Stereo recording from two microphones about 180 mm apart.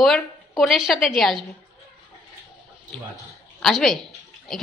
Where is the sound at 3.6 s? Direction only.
Centre (ahead or behind).